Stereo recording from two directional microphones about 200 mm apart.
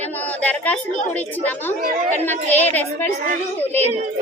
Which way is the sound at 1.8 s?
45° right (ahead or behind).